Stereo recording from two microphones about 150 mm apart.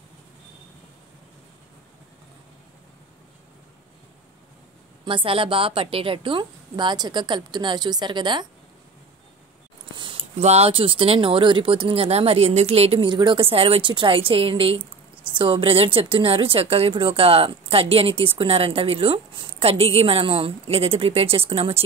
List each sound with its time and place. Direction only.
5.0 s speech: 35° right (ahead or behind)
9.9 s a sound: 35° right (ahead or behind)
10.4 s speech: 45° right (ahead or behind)